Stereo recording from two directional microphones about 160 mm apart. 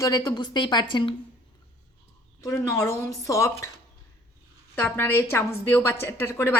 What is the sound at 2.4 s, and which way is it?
A woman's voice, 20° left (ahead or behind).